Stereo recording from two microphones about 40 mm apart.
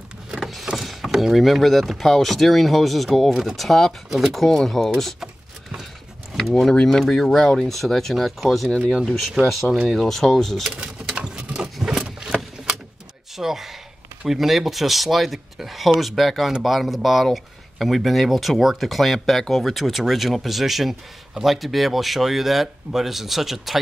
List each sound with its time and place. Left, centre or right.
0.4 s vehicle: centre
0.7 s speech: centre
4.1 s speech: centre
6.7 s speech: centre
11.1 s a sound: right
12.3 s a sound: centre
13.4 s speech: centre